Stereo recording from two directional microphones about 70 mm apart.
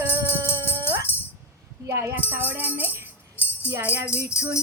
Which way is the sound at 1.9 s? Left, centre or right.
Right.